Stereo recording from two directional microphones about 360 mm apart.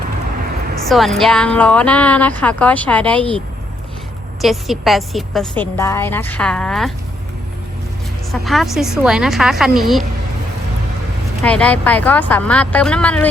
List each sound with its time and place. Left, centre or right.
0.8 s a woman's voice: centre
8.3 s a woman's voice: centre
11.4 s a woman's voice: centre